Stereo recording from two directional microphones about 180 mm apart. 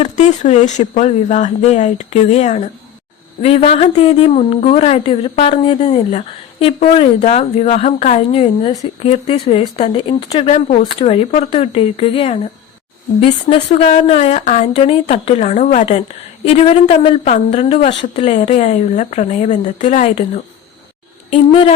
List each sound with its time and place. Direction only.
0.0 s a woman's voice: 40° left (ahead or behind)